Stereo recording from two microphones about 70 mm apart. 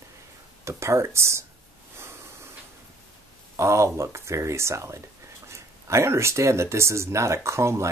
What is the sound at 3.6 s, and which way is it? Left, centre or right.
Speech, right.